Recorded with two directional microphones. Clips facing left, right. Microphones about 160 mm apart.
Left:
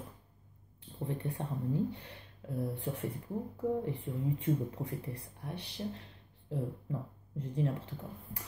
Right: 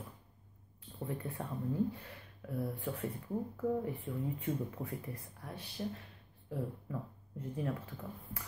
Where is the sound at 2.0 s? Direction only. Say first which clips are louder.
Even; 25° left (ahead or behind).